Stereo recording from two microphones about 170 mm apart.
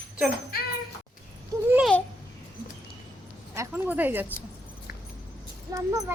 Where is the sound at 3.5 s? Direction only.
10° right (ahead or behind).